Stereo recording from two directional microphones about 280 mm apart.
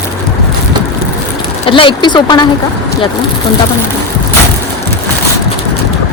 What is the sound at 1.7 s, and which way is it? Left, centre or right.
Speech, centre.